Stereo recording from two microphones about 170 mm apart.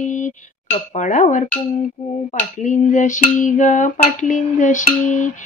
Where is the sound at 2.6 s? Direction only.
45° left (ahead or behind).